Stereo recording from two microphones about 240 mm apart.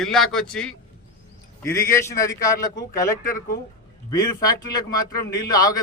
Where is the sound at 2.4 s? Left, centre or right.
Centre.